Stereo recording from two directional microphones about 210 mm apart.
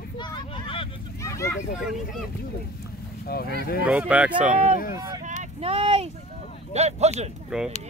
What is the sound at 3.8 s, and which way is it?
Speech, 5° right (ahead or behind).